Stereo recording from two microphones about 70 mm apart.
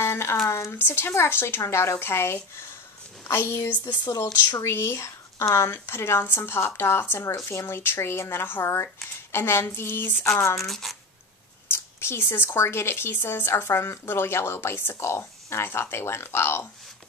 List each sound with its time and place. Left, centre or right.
0.0 s a sound: left
0.5 s speech: left
4.1 s speech: left
4.6 s speech: left
10.6 s speech: centre
11.7 s speech: left